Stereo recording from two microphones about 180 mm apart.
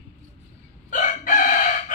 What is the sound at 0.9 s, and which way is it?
Chicken, 45° left (ahead or behind).